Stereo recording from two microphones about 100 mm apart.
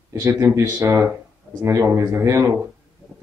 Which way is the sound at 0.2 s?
30° right (ahead or behind).